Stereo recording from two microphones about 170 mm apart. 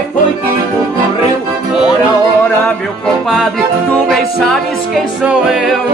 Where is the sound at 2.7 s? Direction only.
Centre (ahead or behind).